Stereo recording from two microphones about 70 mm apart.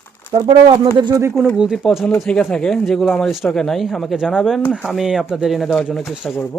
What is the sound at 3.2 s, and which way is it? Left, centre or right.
Speech, centre.